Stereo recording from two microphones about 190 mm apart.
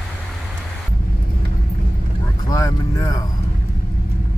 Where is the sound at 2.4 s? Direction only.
20° left (ahead or behind).